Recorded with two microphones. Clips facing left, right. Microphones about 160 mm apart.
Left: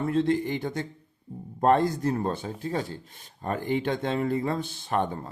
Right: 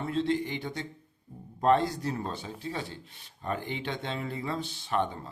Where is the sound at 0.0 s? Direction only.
50° left (ahead or behind).